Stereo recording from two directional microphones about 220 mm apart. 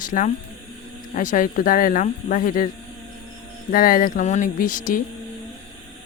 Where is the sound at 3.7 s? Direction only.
40° left (ahead or behind).